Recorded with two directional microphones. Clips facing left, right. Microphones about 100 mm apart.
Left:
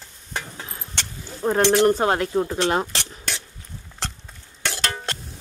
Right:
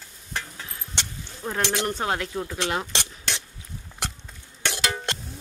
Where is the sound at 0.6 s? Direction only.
30° left (ahead or behind).